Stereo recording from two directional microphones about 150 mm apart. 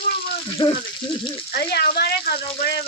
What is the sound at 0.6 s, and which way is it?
Speech, 30° left (ahead or behind).